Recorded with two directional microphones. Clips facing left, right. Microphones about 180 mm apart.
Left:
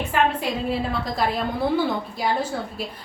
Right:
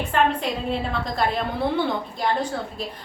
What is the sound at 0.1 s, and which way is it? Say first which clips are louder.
A woman's voice: right 1 dB; 5° left (ahead or behind).